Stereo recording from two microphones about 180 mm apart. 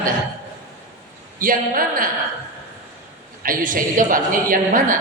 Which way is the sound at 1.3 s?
50° right (ahead or behind).